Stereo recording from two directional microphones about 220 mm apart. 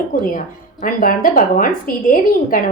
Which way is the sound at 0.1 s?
40° left (ahead or behind).